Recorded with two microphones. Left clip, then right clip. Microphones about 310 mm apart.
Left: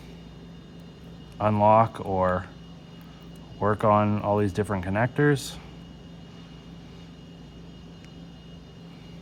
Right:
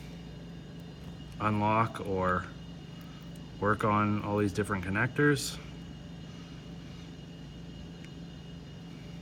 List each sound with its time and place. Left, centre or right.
1.4 s speech: left
3.6 s speech: left